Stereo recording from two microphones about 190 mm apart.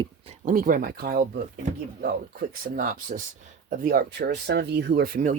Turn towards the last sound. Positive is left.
turn(degrees=-45)  # may be behind; listen again after turning